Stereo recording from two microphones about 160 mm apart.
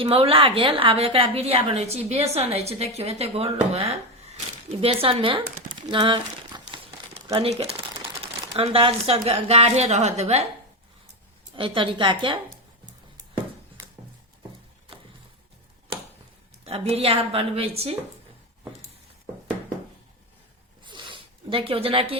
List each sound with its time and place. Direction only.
0.0 s a woman's voice: 35° right (ahead or behind)
7.4 s a woman's voice: 40° right (ahead or behind)
11.5 s a woman's voice: 30° right (ahead or behind)
16.6 s a woman's voice: 40° right (ahead or behind)
20.8 s zipper: 30° right (ahead or behind)